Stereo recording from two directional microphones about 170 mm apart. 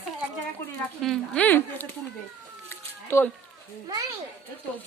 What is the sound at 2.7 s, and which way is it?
Cat, 15° left (ahead or behind).